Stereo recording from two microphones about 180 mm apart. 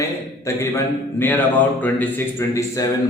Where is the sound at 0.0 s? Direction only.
15° left (ahead or behind).